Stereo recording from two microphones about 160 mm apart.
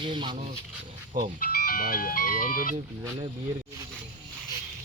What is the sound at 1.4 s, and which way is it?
Speech, 60° left (ahead or behind).